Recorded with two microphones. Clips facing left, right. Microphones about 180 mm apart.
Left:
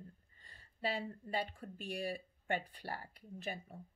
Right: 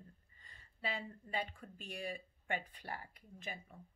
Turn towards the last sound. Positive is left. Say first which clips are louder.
# left 5 dB
turn(degrees=35)  # may be behind; listen again after turning